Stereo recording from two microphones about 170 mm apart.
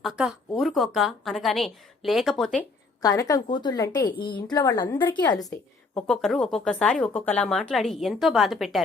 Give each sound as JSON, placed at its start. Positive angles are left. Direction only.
{"t": 0.0, "sound": "speech", "side_deg": 0}
{"t": 3.0, "sound": "a woman's voice", "side_deg": 20}
{"t": 6.1, "sound": "speech", "side_deg": 0}